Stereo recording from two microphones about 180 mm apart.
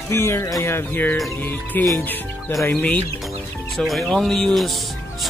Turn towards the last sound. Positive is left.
turn(degrees=0)  # may be behind; listen again after turning